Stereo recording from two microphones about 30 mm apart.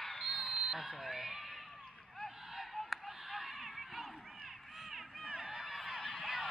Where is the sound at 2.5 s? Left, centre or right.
Centre.